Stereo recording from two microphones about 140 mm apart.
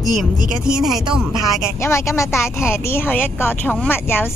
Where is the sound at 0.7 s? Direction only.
5° right (ahead or behind).